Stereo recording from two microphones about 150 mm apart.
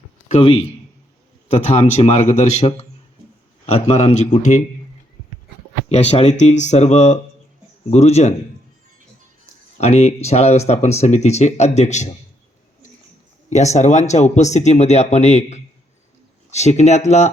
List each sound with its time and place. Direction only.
0.3 s a man's voice: 35° left (ahead or behind); by 4.6 s 55° left (ahead or behind)
5.9 s speech: 45° left (ahead or behind)
9.7 s speech: 45° left (ahead or behind)
13.5 s speech: 50° left (ahead or behind)